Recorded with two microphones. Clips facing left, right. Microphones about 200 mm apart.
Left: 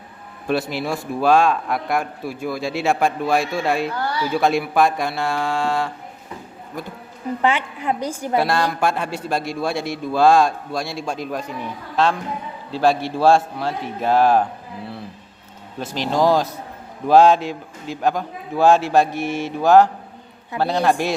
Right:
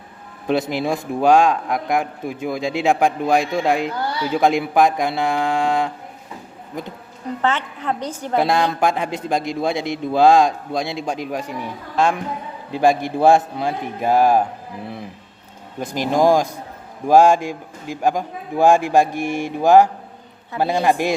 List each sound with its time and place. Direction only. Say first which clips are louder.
0.4 s a man's voice: right 2 dB; 20° right (ahead or behind)
7.4 s a woman's voice: left 1 dB; 10° left (ahead or behind)
8.4 s a man's voice: right 2 dB; 20° right (ahead or behind)
15.8 s a man's voice: right 2 dB; 15° right (ahead or behind)